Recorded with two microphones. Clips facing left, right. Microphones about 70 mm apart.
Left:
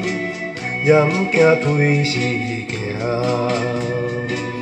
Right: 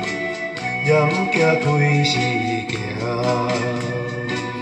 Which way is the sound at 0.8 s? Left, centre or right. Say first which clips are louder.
Left 3 dB; centre.